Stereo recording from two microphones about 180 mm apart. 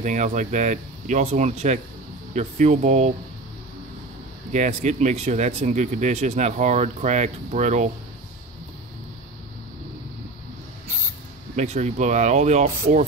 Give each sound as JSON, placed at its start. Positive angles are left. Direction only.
{"t": 0.0, "sound": "speech", "side_deg": -40}
{"t": 4.5, "sound": "speech", "side_deg": -40}
{"t": 11.5, "sound": "speech", "side_deg": -40}